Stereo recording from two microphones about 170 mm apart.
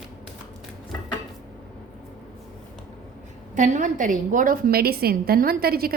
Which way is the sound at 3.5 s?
45° right (ahead or behind).